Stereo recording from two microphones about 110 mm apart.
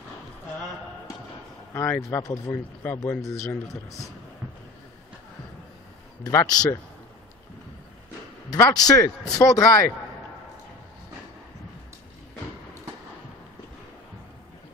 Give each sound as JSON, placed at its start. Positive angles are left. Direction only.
{"t": 1.7, "sound": "speech", "side_deg": 25}
{"t": 6.2, "sound": "speech", "side_deg": 35}
{"t": 8.5, "sound": "speech", "side_deg": 35}